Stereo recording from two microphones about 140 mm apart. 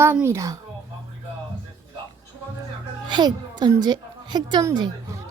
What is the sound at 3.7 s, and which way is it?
Speech, 30° right (ahead or behind).